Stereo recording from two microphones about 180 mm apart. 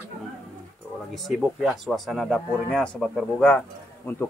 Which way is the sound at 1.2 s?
Centre (ahead or behind).